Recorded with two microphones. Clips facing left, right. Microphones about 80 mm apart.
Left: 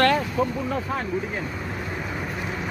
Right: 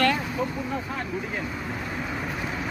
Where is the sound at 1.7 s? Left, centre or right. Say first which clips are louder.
Left 1 dB; centre.